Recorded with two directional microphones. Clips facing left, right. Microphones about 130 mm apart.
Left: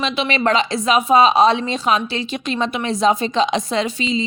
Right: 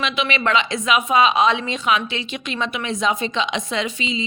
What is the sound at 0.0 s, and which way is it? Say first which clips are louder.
A woman's voice: left 3 dB; 35° left (ahead or behind).